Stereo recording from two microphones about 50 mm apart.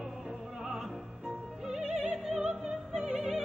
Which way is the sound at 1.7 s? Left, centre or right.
Centre.